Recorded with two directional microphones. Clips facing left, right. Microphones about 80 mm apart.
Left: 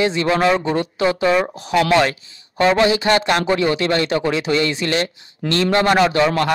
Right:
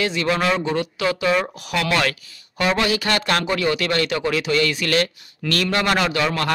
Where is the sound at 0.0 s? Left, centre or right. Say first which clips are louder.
Left 4 dB; left.